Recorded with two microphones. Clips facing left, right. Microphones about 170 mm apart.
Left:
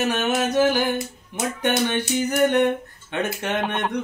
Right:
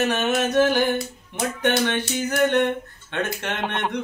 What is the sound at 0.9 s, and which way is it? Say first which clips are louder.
Speech: right 1 dB; 20° left (ahead or behind).